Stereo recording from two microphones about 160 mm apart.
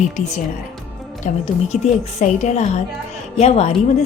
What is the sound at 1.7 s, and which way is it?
Speech, centre (ahead or behind).